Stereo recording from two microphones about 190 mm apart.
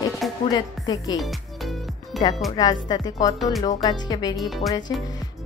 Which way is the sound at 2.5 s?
20° left (ahead or behind).